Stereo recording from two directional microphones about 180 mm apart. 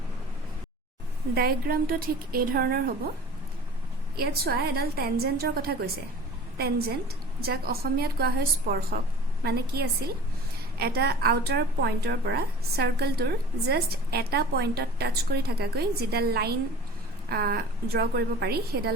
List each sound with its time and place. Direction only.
1.4 s a woman's voice: 55° right (ahead or behind)
4.2 s a woman's voice: 60° right (ahead or behind)